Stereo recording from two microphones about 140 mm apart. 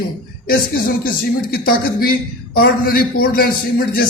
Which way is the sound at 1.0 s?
90° left.